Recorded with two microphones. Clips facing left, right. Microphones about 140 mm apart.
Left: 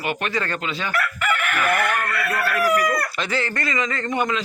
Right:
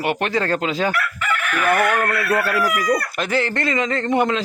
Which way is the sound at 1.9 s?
90° right.